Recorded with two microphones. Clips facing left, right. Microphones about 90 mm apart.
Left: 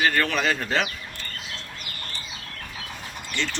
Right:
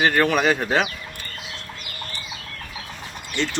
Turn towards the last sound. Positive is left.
turn(degrees=-15)  # may be behind; listen again after turning